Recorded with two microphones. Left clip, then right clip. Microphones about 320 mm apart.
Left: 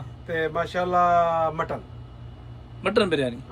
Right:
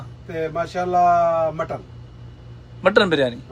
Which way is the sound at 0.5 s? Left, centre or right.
Centre.